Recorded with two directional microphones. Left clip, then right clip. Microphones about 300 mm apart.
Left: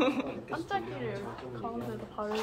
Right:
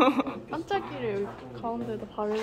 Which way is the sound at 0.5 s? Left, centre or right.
Right.